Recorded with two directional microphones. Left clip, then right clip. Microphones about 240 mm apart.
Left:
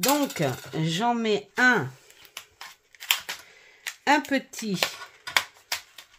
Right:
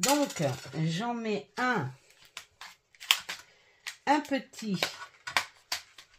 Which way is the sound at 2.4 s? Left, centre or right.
Centre.